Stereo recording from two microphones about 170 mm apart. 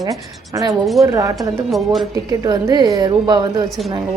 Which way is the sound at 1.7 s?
Centre (ahead or behind).